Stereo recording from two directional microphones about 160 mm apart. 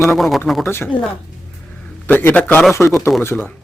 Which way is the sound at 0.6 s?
15° left (ahead or behind).